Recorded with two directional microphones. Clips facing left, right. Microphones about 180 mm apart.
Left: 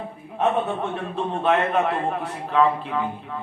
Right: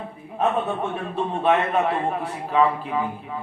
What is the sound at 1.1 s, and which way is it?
A man's voice, 5° right (ahead or behind).